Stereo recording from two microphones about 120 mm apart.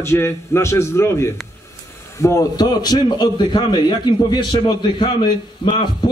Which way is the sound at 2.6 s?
35° left (ahead or behind).